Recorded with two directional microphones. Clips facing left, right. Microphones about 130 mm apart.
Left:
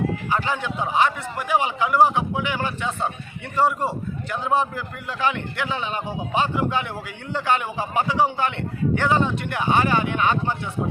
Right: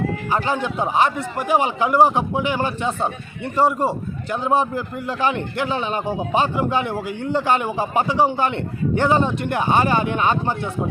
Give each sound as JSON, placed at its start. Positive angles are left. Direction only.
{"t": 0.3, "sound": "a man's voice", "side_deg": -40}